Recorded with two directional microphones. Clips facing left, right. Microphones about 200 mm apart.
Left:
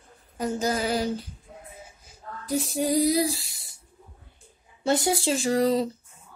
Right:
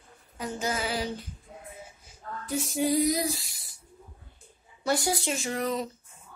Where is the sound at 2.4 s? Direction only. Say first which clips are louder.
Left 2 dB; 40° left (ahead or behind).